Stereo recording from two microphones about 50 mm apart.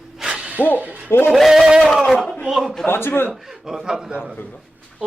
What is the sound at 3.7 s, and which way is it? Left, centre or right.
Speech, centre.